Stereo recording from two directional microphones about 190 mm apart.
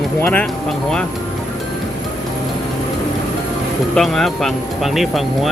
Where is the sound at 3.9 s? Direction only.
Centre (ahead or behind).